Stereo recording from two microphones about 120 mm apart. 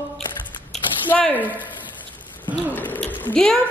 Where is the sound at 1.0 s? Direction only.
15° left (ahead or behind).